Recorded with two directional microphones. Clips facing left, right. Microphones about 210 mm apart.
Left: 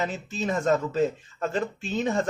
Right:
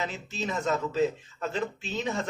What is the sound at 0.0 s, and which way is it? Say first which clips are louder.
Speech: left 4 dB; 50° left (ahead or behind).